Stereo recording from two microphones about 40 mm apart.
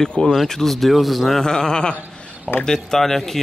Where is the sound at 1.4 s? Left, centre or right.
Centre.